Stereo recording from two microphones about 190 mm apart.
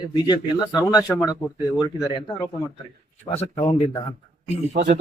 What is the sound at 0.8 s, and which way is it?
A man's voice, 15° left (ahead or behind).